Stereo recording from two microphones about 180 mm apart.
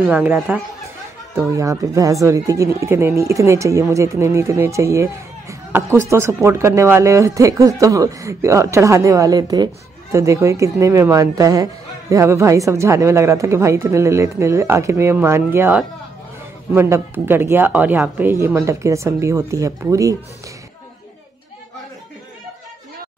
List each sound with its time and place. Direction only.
0.0 s speech: 10° right (ahead or behind)